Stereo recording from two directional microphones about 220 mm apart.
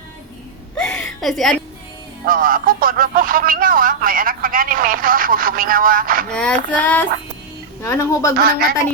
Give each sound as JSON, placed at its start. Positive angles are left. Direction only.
{"t": 0.8, "sound": "a sound", "side_deg": 5}
{"t": 2.2, "sound": "speech", "side_deg": -40}
{"t": 6.3, "sound": "female singing", "side_deg": 5}
{"t": 8.4, "sound": "speech", "side_deg": -45}